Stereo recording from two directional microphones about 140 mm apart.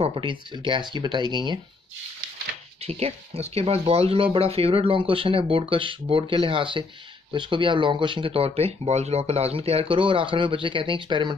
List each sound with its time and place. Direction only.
0.0 s speech: 40° right (ahead or behind)
2.9 s speech: 45° right (ahead or behind)